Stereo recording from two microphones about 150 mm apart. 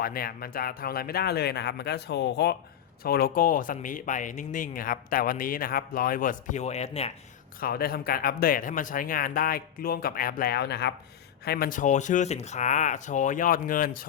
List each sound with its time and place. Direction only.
0.0 s speech: 80° left; by 7.1 s 45° left (ahead or behind)
7.6 s speech: 90° left; by 14.1 s 70° left (ahead or behind)